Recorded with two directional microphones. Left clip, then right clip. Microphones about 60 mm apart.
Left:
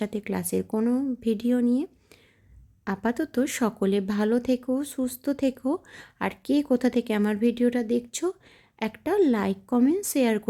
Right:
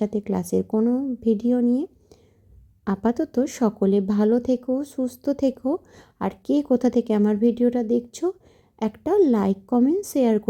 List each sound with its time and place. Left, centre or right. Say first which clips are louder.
0.0 s speech: right 5 dB; centre
0.6 s speech: right 4 dB; centre
1.2 s speech: right 6 dB; centre
2.8 s speech: right 4 dB; right
3.2 s speech: right 3 dB; centre
5.0 s speech: right 5 dB; right
5.6 s speech: right 3 dB; centre
7.2 s speech: right 4 dB; centre
9.0 s speech: right 4 dB; right
9.7 s speech: right 2 dB; centre